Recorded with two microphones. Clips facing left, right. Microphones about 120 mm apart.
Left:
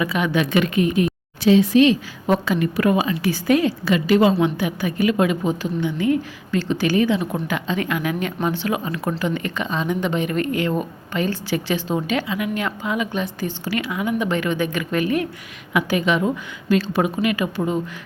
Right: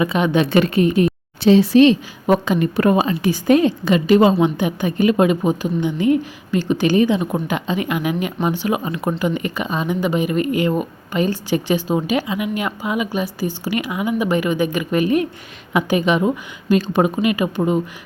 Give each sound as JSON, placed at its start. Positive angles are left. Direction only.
{"t": 0.0, "sound": "speech", "side_deg": -25}
{"t": 2.2, "sound": "a woman's voice", "side_deg": -15}
{"t": 2.6, "sound": "a woman's voice", "side_deg": -30}